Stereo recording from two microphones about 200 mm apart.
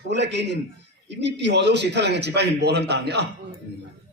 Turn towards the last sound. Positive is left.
turn(degrees=-55)  # may be behind; listen again after turning